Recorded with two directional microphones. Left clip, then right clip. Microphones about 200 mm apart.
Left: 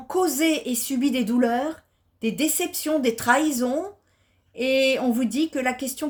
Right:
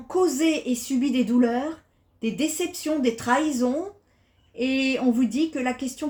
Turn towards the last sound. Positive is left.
turn(degrees=40)  # may be behind; listen again after turning